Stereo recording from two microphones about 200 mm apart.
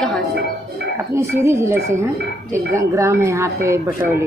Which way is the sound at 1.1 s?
15° right (ahead or behind).